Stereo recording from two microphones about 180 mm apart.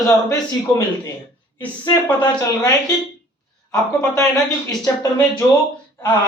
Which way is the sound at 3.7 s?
20° left (ahead or behind).